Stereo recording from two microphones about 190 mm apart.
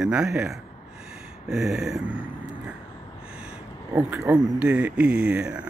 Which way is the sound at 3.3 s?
5° right (ahead or behind).